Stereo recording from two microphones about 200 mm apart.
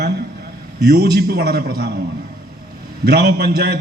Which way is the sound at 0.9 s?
50° right (ahead or behind).